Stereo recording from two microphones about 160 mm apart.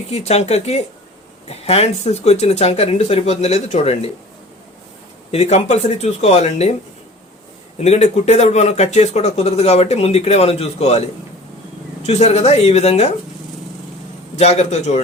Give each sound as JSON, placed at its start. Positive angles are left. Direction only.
{"t": 0.1, "sound": "speech", "side_deg": 40}
{"t": 5.3, "sound": "speech", "side_deg": 40}
{"t": 7.8, "sound": "speech", "side_deg": 45}
{"t": 14.3, "sound": "speech", "side_deg": 45}